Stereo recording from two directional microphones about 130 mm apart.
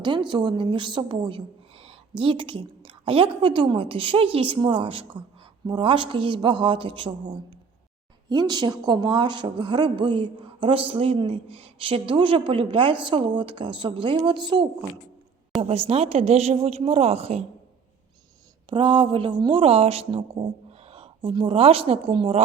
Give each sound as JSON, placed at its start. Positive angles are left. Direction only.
{"t": 0.0, "sound": "a woman's voice", "side_deg": -35}
{"t": 15.6, "sound": "speech", "side_deg": -50}
{"t": 18.7, "sound": "speech", "side_deg": -40}